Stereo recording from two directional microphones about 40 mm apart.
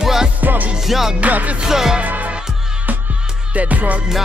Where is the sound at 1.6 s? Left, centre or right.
Centre.